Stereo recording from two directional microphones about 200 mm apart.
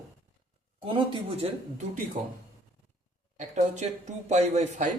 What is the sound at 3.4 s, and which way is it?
Speech, 35° right (ahead or behind).